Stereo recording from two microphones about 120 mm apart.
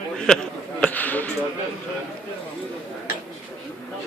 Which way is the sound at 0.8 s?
15° left (ahead or behind).